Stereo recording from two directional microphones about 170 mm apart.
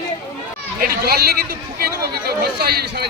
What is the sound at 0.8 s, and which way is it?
Speech, 70° right (ahead or behind).